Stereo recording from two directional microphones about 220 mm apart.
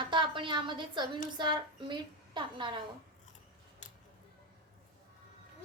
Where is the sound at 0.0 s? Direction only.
20° right (ahead or behind).